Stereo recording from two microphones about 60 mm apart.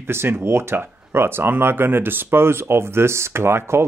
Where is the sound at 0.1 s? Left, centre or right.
Right.